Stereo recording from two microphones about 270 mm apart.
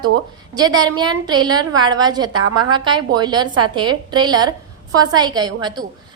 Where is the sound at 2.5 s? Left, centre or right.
Centre.